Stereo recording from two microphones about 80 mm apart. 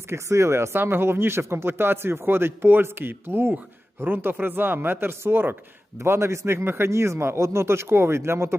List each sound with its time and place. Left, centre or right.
0.1 s a man's voice: right